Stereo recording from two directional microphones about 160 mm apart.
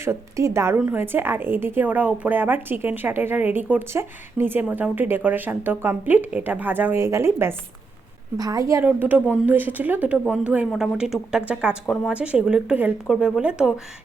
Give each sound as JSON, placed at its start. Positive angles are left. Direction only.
{"t": 0.0, "sound": "a woman's voice", "side_deg": -15}